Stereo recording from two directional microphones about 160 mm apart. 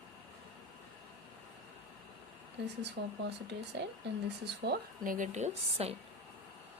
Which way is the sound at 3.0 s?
65° right (ahead or behind).